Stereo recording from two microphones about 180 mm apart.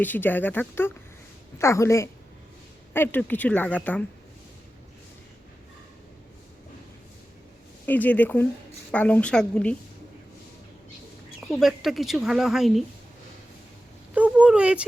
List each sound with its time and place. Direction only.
0.0 s speech: 10° left (ahead or behind)
7.9 s speech: 10° left (ahead or behind)
11.3 s speech: centre (ahead or behind)
14.1 s speech: 5° right (ahead or behind)